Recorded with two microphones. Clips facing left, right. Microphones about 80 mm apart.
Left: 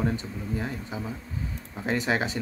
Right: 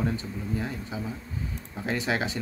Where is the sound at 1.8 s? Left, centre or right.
Left.